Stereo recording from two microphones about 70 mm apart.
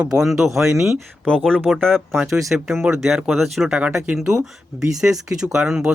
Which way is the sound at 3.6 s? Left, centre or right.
Centre.